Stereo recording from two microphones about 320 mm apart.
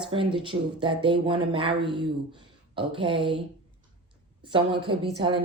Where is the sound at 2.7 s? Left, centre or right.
Centre.